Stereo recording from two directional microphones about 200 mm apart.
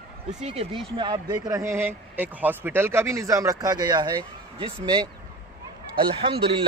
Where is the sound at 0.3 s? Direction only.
30° right (ahead or behind).